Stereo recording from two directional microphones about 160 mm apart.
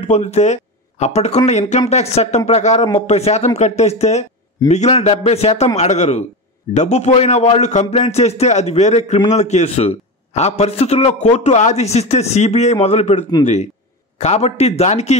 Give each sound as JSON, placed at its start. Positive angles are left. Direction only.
{"t": 0.1, "sound": "a man's voice", "side_deg": 45}
{"t": 14.2, "sound": "a man's voice", "side_deg": 45}